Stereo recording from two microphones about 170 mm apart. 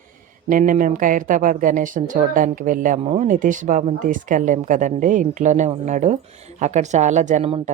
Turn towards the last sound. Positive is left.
turn(degrees=-40)  # may be behind; listen again after turning